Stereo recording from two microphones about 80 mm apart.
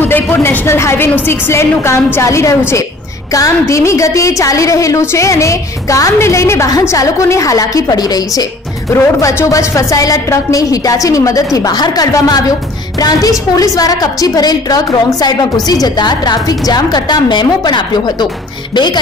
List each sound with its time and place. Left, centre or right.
0.0 s a woman's voice: left
8.9 s a woman's voice: left